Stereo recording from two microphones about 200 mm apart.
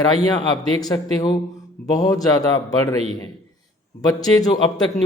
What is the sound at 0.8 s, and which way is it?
A man's voice, 20° left (ahead or behind).